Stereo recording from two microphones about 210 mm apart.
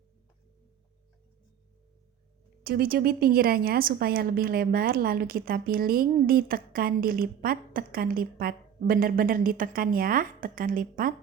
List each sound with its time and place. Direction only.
2.6 s a woman's voice: 45° right (ahead or behind)